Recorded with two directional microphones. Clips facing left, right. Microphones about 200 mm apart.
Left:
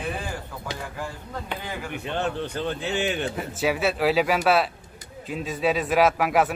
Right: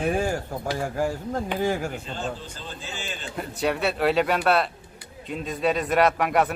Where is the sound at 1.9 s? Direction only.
65° left (ahead or behind).